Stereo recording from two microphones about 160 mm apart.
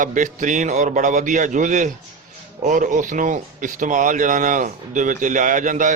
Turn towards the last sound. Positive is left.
turn(degrees=-55)  # may be behind; listen again after turning